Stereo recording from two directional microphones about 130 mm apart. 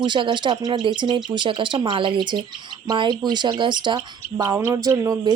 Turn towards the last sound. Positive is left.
turn(degrees=-25)  # may be behind; listen again after turning